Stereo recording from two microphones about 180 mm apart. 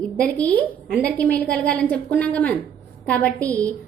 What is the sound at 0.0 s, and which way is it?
A woman's voice, 5° left (ahead or behind).